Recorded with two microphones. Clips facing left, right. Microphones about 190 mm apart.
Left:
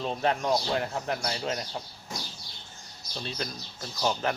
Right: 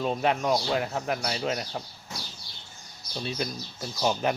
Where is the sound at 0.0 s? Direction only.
10° right (ahead or behind).